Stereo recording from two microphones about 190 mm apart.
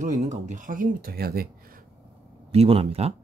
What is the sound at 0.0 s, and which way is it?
Speech, 40° right (ahead or behind).